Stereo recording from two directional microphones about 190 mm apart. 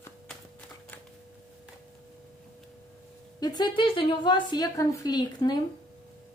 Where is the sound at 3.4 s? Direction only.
25° left (ahead or behind).